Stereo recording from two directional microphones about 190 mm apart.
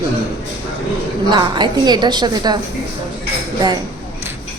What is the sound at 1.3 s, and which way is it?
A woman's voice, 25° right (ahead or behind).